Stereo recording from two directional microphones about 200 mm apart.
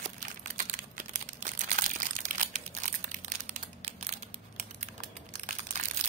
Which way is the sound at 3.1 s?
40° right (ahead or behind).